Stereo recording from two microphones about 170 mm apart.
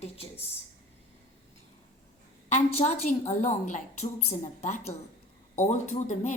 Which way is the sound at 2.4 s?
40° left (ahead or behind).